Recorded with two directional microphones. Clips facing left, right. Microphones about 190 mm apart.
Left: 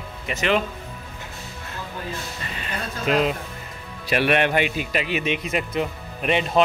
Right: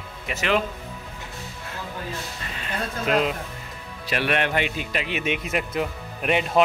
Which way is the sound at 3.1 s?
Centre (ahead or behind).